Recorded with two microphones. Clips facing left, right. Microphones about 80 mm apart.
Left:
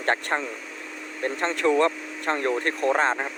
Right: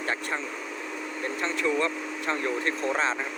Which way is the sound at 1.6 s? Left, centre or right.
Left.